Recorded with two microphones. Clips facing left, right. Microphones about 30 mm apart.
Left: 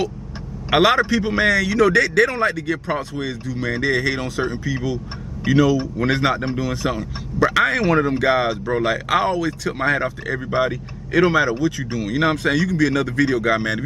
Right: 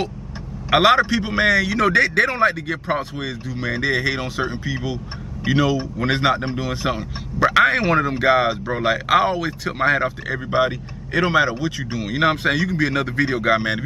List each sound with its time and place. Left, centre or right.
0.7 s a man's voice: centre
0.9 s a man's voice: centre
8.3 s speech: centre
9.3 s a man's voice: right
10.0 s a man's voice: centre